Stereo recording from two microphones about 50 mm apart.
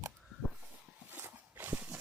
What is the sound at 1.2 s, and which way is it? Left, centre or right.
Horse, right.